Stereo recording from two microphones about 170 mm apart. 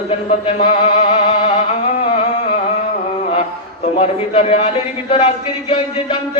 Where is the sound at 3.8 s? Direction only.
40° left (ahead or behind).